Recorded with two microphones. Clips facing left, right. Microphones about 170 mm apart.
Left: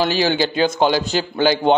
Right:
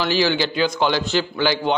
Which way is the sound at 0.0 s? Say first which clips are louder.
Left 2 dB; 45° left (ahead or behind).